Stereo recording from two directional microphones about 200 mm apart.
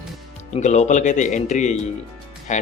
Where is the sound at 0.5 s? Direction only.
35° left (ahead or behind).